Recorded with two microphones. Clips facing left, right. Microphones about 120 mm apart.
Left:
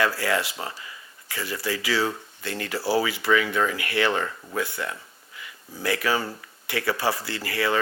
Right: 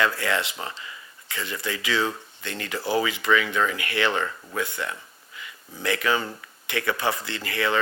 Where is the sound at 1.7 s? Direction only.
20° right (ahead or behind).